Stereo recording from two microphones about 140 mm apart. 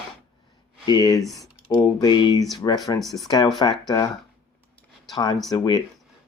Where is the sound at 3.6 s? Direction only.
30° left (ahead or behind).